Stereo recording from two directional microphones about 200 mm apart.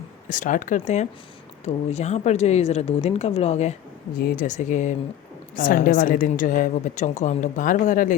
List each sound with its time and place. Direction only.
0.3 s a woman's voice: 40° left (ahead or behind)